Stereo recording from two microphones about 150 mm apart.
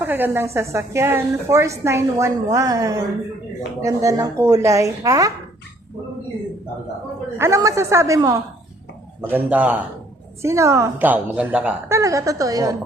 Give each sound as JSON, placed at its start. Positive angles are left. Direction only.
{"t": 0.0, "sound": "a woman's voice", "side_deg": -15}
{"t": 7.3, "sound": "a woman's voice", "side_deg": -20}
{"t": 9.3, "sound": "a man's voice", "side_deg": -10}